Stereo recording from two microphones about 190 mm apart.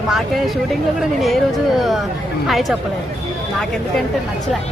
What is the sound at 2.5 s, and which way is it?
Speech, centre (ahead or behind).